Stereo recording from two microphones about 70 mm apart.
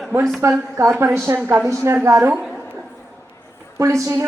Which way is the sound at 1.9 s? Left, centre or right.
Right.